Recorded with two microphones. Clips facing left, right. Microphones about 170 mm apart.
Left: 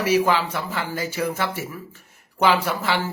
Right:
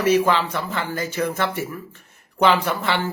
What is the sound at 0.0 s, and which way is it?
A man's voice, 10° left (ahead or behind).